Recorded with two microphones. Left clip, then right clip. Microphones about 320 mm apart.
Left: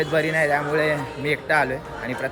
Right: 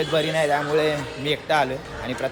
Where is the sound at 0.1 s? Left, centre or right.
Centre.